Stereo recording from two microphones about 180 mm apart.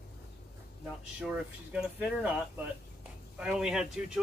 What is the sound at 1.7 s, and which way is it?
Speech, 5° right (ahead or behind).